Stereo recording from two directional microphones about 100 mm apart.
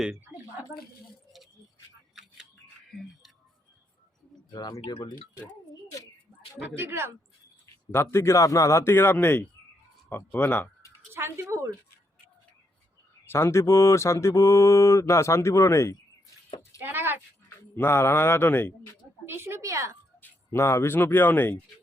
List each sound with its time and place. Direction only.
4.5 s speech: 45° left (ahead or behind)
6.7 s speech: 25° right (ahead or behind)
7.9 s speech: 25° left (ahead or behind)
11.1 s a sound: 25° right (ahead or behind)
13.2 s speech: 25° left (ahead or behind)
16.8 s a sound: 20° right (ahead or behind)
17.7 s speech: 25° left (ahead or behind)
19.2 s a sound: 25° right (ahead or behind)
20.5 s speech: 25° left (ahead or behind)